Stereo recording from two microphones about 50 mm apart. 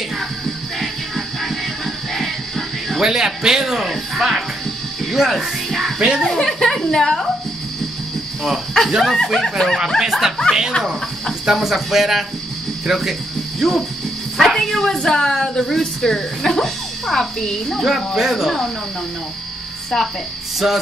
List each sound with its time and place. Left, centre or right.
0.7 s music: centre
3.0 s speech: centre
5.1 s music: centre
5.9 s a child's voice: centre
6.2 s a woman's voice: centre
8.5 s a woman's voice: centre
9.9 s speech: centre
11.5 s a woman's voice: centre
20.6 s speech: centre